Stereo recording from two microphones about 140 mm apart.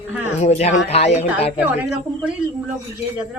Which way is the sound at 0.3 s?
50° left (ahead or behind).